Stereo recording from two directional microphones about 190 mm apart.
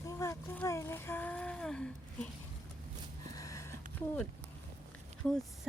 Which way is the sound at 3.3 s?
15° left (ahead or behind).